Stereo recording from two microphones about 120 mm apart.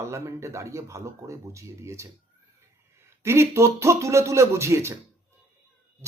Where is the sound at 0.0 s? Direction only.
25° right (ahead or behind).